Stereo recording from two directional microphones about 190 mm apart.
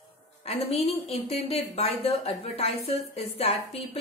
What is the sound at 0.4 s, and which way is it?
A woman's voice, 30° left (ahead or behind).